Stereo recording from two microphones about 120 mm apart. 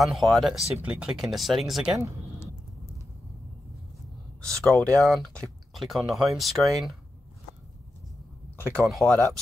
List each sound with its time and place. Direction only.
0.0 s speech: centre (ahead or behind)
4.4 s speech: 5° left (ahead or behind)
8.7 s speech: 5° left (ahead or behind)